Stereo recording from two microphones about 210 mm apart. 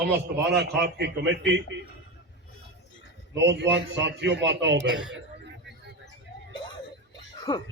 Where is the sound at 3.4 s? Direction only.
55° right (ahead or behind).